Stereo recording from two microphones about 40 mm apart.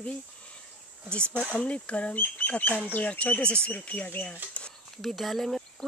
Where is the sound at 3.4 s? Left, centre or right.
Left.